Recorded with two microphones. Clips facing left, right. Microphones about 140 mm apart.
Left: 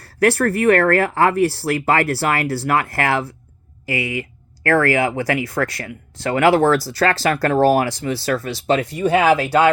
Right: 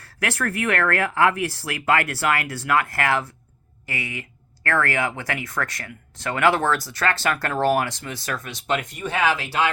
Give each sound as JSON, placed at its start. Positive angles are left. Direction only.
{"t": 0.0, "sound": "speech", "side_deg": 35}